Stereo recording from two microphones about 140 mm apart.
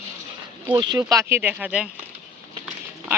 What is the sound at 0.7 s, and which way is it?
Speech, 30° right (ahead or behind).